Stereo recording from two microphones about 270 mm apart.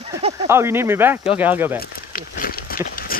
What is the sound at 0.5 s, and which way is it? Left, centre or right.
Speech, centre.